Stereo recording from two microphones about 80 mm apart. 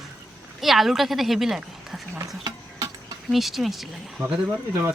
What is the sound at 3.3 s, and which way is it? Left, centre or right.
Speech, centre.